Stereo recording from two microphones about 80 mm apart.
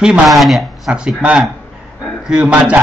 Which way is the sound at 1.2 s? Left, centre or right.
Centre.